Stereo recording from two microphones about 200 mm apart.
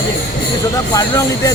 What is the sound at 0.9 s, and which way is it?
Speech, 15° left (ahead or behind).